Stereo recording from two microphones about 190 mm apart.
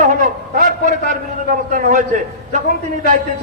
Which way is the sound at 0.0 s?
45° right (ahead or behind).